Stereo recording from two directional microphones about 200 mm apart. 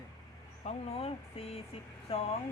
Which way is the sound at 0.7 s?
30° left (ahead or behind).